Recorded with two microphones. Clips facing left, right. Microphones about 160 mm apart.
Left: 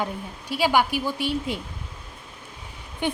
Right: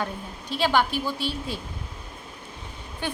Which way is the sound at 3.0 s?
15° left (ahead or behind).